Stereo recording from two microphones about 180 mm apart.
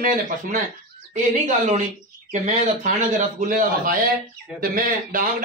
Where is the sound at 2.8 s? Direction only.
45° right (ahead or behind).